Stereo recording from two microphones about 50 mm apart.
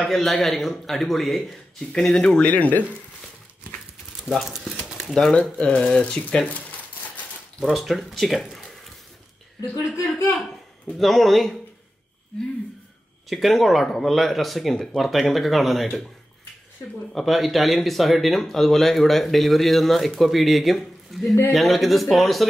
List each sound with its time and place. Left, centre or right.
0.0 s speech: centre
2.0 s speech: centre
2.4 s speech: left
4.2 s speech: centre
5.3 s speech: left
7.6 s speech: centre
9.9 s speech: left
10.9 s speech: centre
13.3 s speech: centre
17.1 s speech: centre